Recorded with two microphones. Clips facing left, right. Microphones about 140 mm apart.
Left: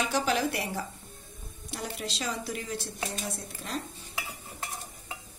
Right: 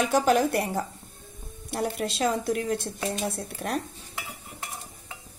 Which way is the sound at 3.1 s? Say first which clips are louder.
Right 6 dB; 65° right (ahead or behind).